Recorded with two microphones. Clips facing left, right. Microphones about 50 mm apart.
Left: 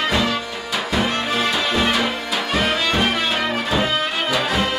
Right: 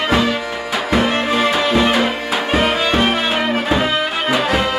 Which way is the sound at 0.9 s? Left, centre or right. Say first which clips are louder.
Right 5 dB; right.